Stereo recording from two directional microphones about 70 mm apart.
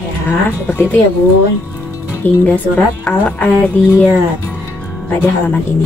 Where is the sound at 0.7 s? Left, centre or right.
Left.